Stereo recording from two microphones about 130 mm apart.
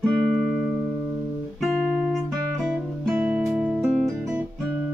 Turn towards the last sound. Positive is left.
turn(degrees=-5)  # may be behind; listen again after turning